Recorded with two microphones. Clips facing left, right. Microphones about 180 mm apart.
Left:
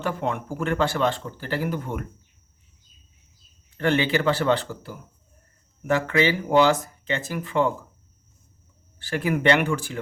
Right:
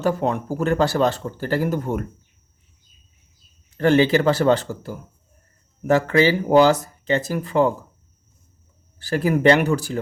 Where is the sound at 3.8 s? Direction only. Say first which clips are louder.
Right 6 dB; 40° right (ahead or behind).